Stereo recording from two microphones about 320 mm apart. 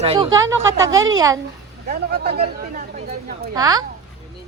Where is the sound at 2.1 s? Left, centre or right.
Right.